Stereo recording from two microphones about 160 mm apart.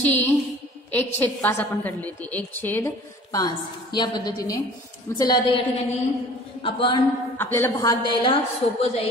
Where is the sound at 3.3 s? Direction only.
25° left (ahead or behind).